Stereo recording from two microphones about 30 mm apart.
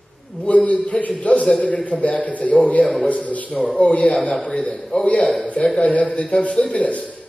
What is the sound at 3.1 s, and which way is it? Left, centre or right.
A man's voice, left.